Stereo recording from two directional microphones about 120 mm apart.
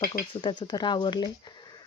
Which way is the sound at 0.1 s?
40° left (ahead or behind).